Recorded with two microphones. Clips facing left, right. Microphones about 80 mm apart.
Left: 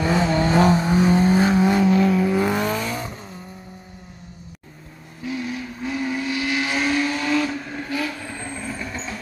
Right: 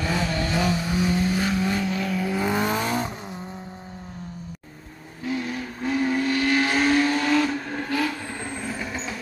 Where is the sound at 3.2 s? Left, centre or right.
Right.